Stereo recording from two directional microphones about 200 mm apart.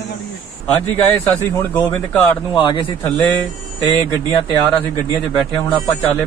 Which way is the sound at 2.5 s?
25° left (ahead or behind).